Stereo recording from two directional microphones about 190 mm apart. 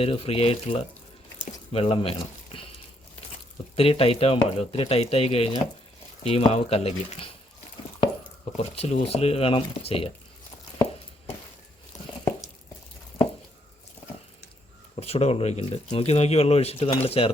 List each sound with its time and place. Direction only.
0.0 s speech: 30° left (ahead or behind)
3.8 s speech: 30° left (ahead or behind)
8.7 s speech: 30° left (ahead or behind)
11.9 s a sound: 20° left (ahead or behind)
14.9 s speech: 30° left (ahead or behind)